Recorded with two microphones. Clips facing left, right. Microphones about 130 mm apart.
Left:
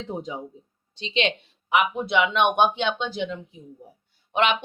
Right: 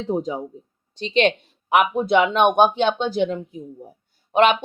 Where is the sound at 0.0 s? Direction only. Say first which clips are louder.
Right 8 dB; 40° right (ahead or behind).